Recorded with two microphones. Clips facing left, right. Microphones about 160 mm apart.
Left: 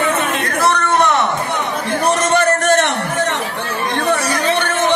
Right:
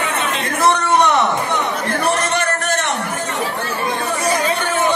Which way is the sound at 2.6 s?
50° left (ahead or behind).